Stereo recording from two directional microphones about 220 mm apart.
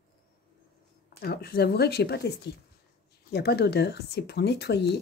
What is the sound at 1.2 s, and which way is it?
Speech, 45° left (ahead or behind).